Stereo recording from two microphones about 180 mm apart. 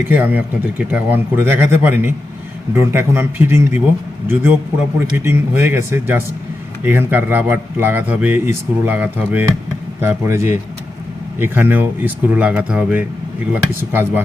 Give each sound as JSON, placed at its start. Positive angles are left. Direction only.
{"t": 0.1, "sound": "speech", "side_deg": -10}
{"t": 4.9, "sound": "speech", "side_deg": -15}